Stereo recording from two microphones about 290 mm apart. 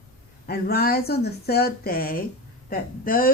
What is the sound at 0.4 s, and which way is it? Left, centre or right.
A woman's voice, left.